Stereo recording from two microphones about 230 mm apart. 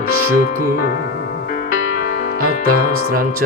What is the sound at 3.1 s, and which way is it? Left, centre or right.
Music, right.